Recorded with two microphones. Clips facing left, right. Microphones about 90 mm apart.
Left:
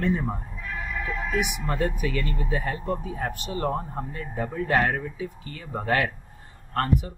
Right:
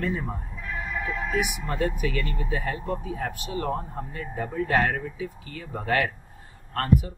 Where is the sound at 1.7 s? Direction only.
35° left (ahead or behind).